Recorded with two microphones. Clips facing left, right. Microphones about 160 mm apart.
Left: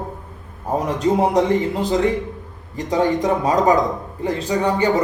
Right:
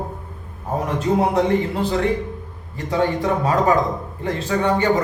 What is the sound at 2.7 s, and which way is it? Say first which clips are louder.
A man's voice: left 2 dB; 20° left (ahead or behind).